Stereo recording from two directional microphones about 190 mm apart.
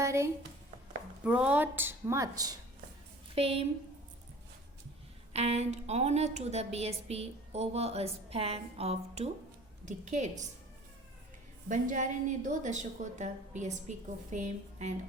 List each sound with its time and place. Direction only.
0.0 s a woman's voice: 15° right (ahead or behind)
3.3 s a woman's voice: 30° right (ahead or behind)
5.3 s a woman's voice: 35° right (ahead or behind)
11.7 s a woman's voice: 40° right (ahead or behind)